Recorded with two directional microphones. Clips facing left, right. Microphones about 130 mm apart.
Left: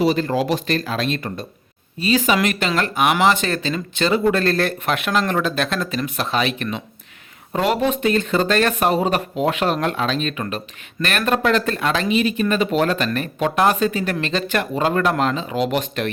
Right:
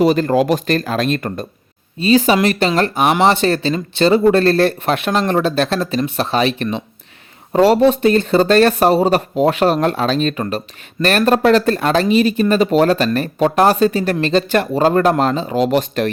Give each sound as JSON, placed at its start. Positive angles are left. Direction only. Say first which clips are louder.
{"t": 0.0, "sound": "speech", "louder": "right 5 dB", "side_deg": -45}
{"t": 2.0, "sound": "speech", "louder": "right 5 dB", "side_deg": -30}